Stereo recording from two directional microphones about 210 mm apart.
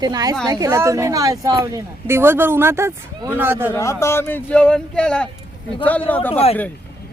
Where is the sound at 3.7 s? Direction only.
15° left (ahead or behind).